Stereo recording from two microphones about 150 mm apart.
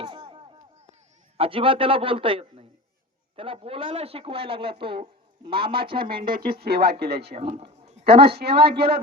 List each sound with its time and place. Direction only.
0.0 s chop: 35° right (ahead or behind)
1.4 s speech: 35° right (ahead or behind)
6.2 s a woman's voice: 80° right
7.3 s speech: 50° right (ahead or behind)
8.0 s a woman's voice: 90° right